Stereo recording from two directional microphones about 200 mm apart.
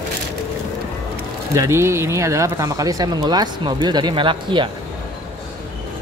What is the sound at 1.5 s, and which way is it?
Speech, 15° right (ahead or behind).